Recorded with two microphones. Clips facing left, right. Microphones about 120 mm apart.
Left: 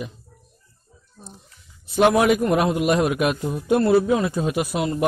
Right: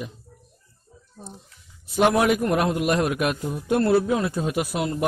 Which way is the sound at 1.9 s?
Centre (ahead or behind).